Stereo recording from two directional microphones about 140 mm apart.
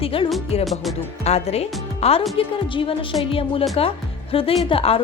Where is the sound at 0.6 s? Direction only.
Centre (ahead or behind).